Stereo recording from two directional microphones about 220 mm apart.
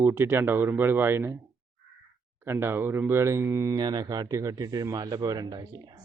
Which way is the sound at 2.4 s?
10° right (ahead or behind).